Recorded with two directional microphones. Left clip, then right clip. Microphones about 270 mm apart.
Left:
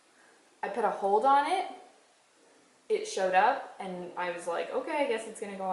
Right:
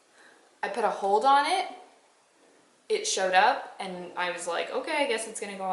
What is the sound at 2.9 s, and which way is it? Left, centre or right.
A woman's voice, centre.